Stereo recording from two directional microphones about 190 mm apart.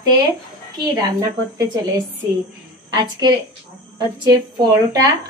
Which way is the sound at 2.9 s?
20° right (ahead or behind).